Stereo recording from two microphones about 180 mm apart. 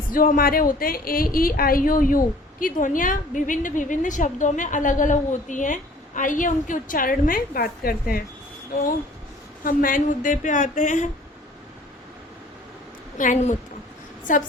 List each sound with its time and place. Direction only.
0.1 s a woman's voice: 50° left (ahead or behind)
9.6 s a woman's voice: 50° left (ahead or behind)
13.1 s a woman's voice: 45° left (ahead or behind)